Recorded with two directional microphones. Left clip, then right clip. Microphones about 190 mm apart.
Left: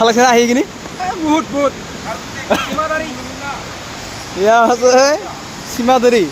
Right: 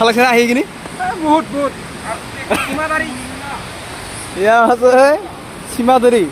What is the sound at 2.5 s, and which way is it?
Speech, 10° left (ahead or behind).